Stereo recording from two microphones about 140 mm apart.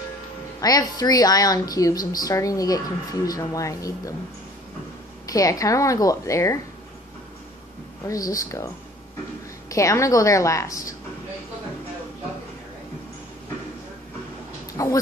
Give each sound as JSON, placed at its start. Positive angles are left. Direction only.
{"t": 0.6, "sound": "speech", "side_deg": 25}
{"t": 5.3, "sound": "speech", "side_deg": 25}
{"t": 8.1, "sound": "speech", "side_deg": 25}
{"t": 9.7, "sound": "speech", "side_deg": 20}
{"t": 14.7, "sound": "a sound", "side_deg": 25}